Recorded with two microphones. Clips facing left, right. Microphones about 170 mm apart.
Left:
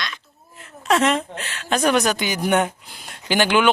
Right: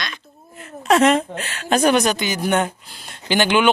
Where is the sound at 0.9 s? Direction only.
45° right (ahead or behind).